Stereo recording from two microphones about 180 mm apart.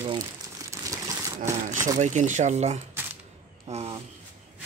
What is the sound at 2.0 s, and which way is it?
Speech, 40° right (ahead or behind).